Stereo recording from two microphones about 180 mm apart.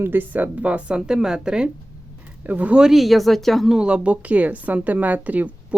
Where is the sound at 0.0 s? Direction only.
10° right (ahead or behind).